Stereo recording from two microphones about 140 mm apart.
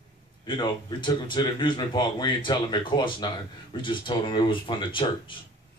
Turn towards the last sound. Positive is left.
turn(degrees=35)  # may be behind; listen again after turning